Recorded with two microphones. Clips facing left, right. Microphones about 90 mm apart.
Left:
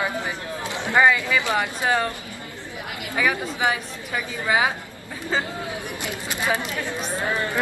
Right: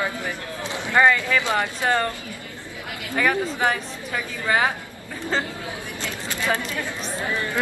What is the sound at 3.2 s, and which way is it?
A woman's voice, 10° left (ahead or behind).